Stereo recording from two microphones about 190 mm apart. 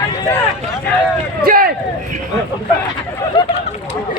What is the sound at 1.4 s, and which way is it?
Speech, 50° right (ahead or behind).